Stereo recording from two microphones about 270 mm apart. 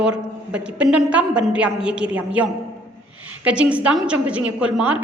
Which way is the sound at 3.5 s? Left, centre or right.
Centre.